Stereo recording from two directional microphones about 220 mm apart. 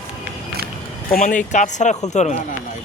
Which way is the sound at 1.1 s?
35° left (ahead or behind).